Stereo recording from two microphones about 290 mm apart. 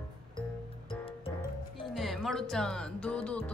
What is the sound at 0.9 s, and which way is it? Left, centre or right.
Music, centre.